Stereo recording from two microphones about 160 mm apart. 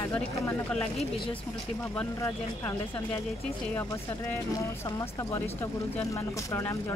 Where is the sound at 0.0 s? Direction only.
10° left (ahead or behind).